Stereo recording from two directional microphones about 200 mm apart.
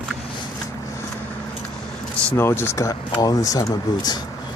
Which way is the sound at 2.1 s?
10° left (ahead or behind).